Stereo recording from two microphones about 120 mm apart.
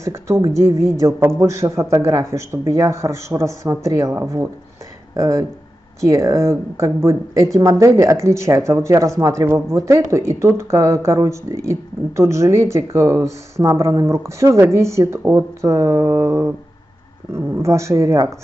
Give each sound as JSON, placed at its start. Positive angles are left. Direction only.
{"t": 0.0, "sound": "speech", "side_deg": -25}